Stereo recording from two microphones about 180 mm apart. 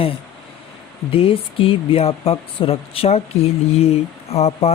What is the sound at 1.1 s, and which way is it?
Speech, 30° left (ahead or behind).